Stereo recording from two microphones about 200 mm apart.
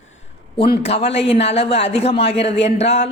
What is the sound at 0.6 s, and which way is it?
Speech, 50° left (ahead or behind).